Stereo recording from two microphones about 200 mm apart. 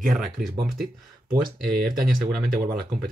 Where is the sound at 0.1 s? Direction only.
Centre (ahead or behind).